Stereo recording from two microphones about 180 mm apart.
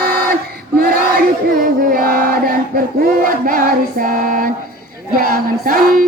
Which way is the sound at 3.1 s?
50° right (ahead or behind).